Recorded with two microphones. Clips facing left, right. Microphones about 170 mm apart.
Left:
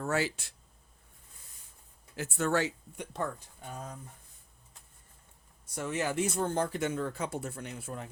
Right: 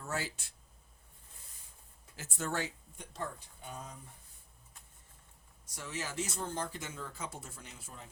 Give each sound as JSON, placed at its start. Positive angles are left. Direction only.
{"t": 0.0, "sound": "speech", "side_deg": 75}
{"t": 2.1, "sound": "speech", "side_deg": 70}
{"t": 5.6, "sound": "speech", "side_deg": 60}